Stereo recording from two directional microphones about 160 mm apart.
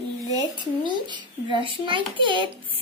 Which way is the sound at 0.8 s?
30° right (ahead or behind).